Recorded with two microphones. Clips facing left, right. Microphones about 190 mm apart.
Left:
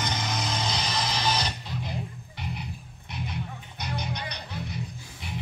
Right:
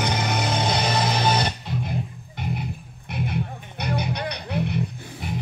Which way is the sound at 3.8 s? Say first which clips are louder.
Right 7 dB; 65° right (ahead or behind).